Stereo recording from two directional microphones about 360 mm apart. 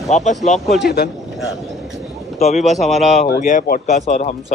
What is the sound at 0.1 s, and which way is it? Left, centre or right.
A man's voice, centre.